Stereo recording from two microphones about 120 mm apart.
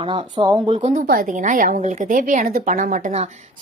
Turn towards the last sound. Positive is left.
turn(degrees=-75)  # may be behind; listen again after turning